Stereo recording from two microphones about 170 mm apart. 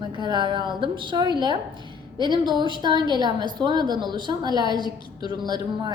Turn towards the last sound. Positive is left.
turn(degrees=-25)  # may be behind; listen again after turning